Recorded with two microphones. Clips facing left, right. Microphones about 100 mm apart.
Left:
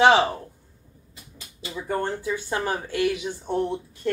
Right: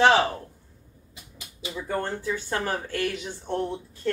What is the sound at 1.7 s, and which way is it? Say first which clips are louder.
Speech: left 2 dB; 15° left (ahead or behind).